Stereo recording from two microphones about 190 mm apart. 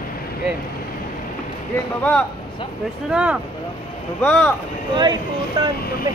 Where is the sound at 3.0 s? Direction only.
5° right (ahead or behind).